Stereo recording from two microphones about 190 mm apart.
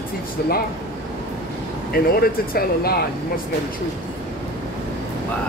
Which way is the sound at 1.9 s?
55° left (ahead or behind).